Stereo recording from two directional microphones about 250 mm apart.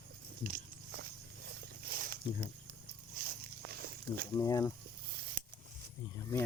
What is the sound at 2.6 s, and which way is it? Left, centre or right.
Walk, right.